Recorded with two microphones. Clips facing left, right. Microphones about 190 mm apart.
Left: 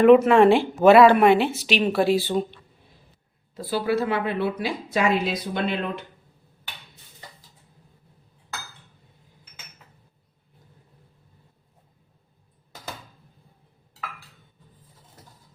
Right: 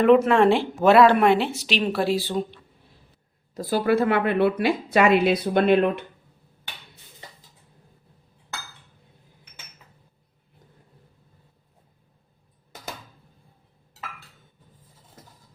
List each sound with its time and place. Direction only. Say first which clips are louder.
0.0 s speech: left 2 dB; 5° left (ahead or behind)
3.5 s a woman's voice: right 3 dB; 45° right (ahead or behind)